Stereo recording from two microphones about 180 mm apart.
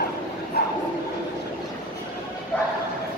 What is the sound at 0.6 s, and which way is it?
Bow-wow, 65° left (ahead or behind).